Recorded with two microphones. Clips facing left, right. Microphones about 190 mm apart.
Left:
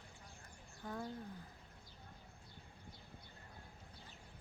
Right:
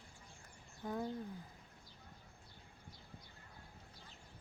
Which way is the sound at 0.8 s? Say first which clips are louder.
Right 4 dB; 20° right (ahead or behind).